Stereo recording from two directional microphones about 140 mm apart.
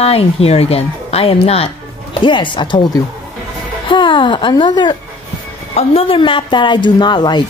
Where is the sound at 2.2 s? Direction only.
35° left (ahead or behind).